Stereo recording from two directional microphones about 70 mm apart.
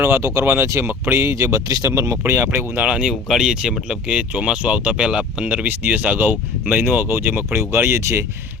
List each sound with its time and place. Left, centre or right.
0.0 s speech: right
2.7 s speech: centre
5.6 s speech: right